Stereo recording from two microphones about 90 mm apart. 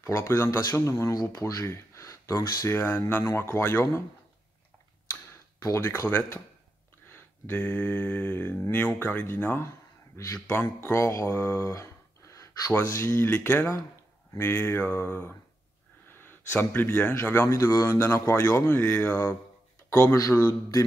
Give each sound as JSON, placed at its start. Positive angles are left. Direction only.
{"t": 0.0, "sound": "speech", "side_deg": 35}
{"t": 3.3, "sound": "speech", "side_deg": 30}
{"t": 5.8, "sound": "speech", "side_deg": 20}
{"t": 7.1, "sound": "a sound", "side_deg": 25}
{"t": 7.5, "sound": "speech", "side_deg": 15}